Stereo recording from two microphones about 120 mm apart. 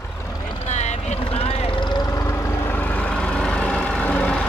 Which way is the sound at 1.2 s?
55° left (ahead or behind).